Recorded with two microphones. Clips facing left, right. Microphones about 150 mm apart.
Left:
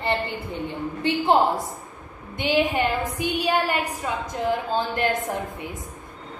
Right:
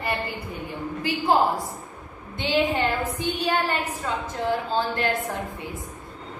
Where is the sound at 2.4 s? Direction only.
15° left (ahead or behind).